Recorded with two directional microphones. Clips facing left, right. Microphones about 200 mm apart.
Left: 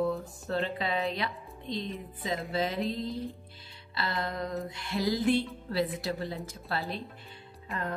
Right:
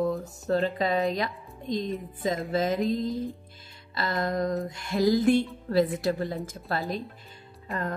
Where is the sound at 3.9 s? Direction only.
45° right (ahead or behind).